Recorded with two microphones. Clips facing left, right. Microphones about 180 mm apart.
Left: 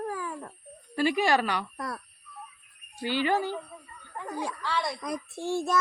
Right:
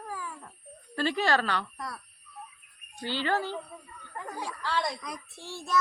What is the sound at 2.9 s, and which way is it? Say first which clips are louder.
Speech: left 3 dB; 10° left (ahead or behind).